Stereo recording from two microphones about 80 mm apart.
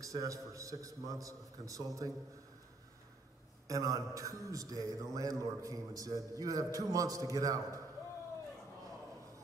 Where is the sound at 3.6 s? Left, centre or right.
Right.